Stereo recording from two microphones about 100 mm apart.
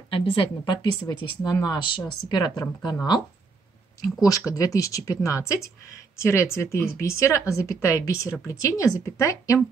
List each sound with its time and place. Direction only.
0.1 s a woman's voice: 65° left (ahead or behind)
1.0 s speech: 40° left (ahead or behind)